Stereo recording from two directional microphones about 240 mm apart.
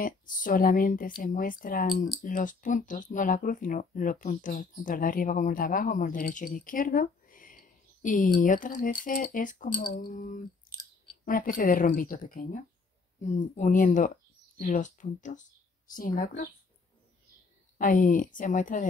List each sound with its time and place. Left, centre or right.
0.0 s speech: left
10.7 s a sound: left
11.2 s speech: left
17.7 s speech: left